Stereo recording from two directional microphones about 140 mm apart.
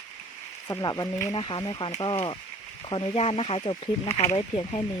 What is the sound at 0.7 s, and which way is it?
Speech, 25° left (ahead or behind).